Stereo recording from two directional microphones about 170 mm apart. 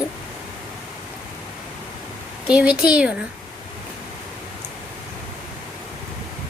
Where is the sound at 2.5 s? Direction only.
5° right (ahead or behind).